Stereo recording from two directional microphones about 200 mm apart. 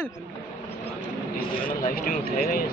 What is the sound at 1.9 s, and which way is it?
Speech, 45° left (ahead or behind).